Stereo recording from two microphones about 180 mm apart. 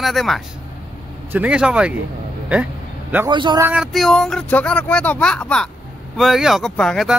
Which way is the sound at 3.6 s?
10° right (ahead or behind).